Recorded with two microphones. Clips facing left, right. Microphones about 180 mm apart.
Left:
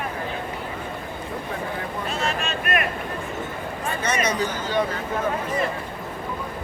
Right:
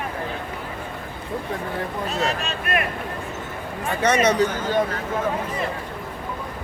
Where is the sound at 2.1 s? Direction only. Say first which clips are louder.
Right 1 dB; 35° right (ahead or behind).